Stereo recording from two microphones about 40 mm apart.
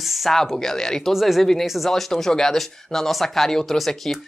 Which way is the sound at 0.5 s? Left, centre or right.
Centre.